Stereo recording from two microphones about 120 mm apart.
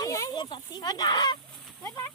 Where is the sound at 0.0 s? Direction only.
30° left (ahead or behind).